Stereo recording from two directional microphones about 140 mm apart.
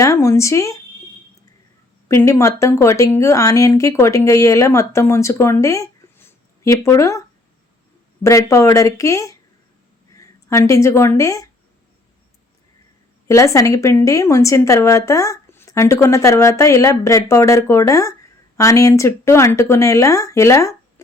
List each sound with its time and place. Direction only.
0.0 s speech: 20° left (ahead or behind)
2.0 s speech: 20° left (ahead or behind)
13.2 s speech: 20° left (ahead or behind)